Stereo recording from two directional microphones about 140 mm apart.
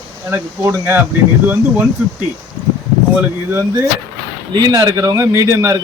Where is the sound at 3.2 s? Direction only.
15° right (ahead or behind).